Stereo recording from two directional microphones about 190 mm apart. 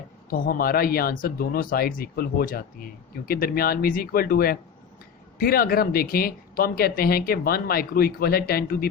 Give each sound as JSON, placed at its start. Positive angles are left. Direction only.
{"t": 0.3, "sound": "speech", "side_deg": 50}